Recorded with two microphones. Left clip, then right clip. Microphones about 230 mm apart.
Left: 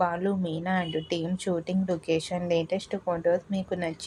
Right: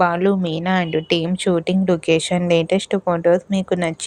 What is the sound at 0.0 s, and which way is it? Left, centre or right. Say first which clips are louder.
Speech: right 10 dB; right.